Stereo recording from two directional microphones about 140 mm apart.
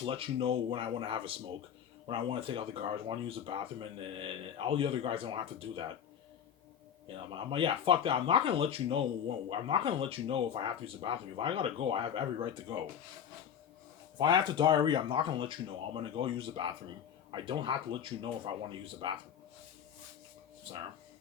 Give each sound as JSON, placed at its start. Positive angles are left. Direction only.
{"t": 0.0, "sound": "speech", "side_deg": -40}
{"t": 7.3, "sound": "speech", "side_deg": -35}
{"t": 14.2, "sound": "speech", "side_deg": -35}
{"t": 20.7, "sound": "speech", "side_deg": -40}